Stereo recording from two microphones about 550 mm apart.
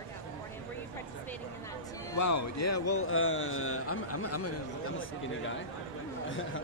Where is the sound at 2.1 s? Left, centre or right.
Left.